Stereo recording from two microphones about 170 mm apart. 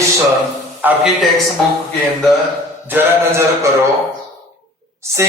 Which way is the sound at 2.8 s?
10° right (ahead or behind).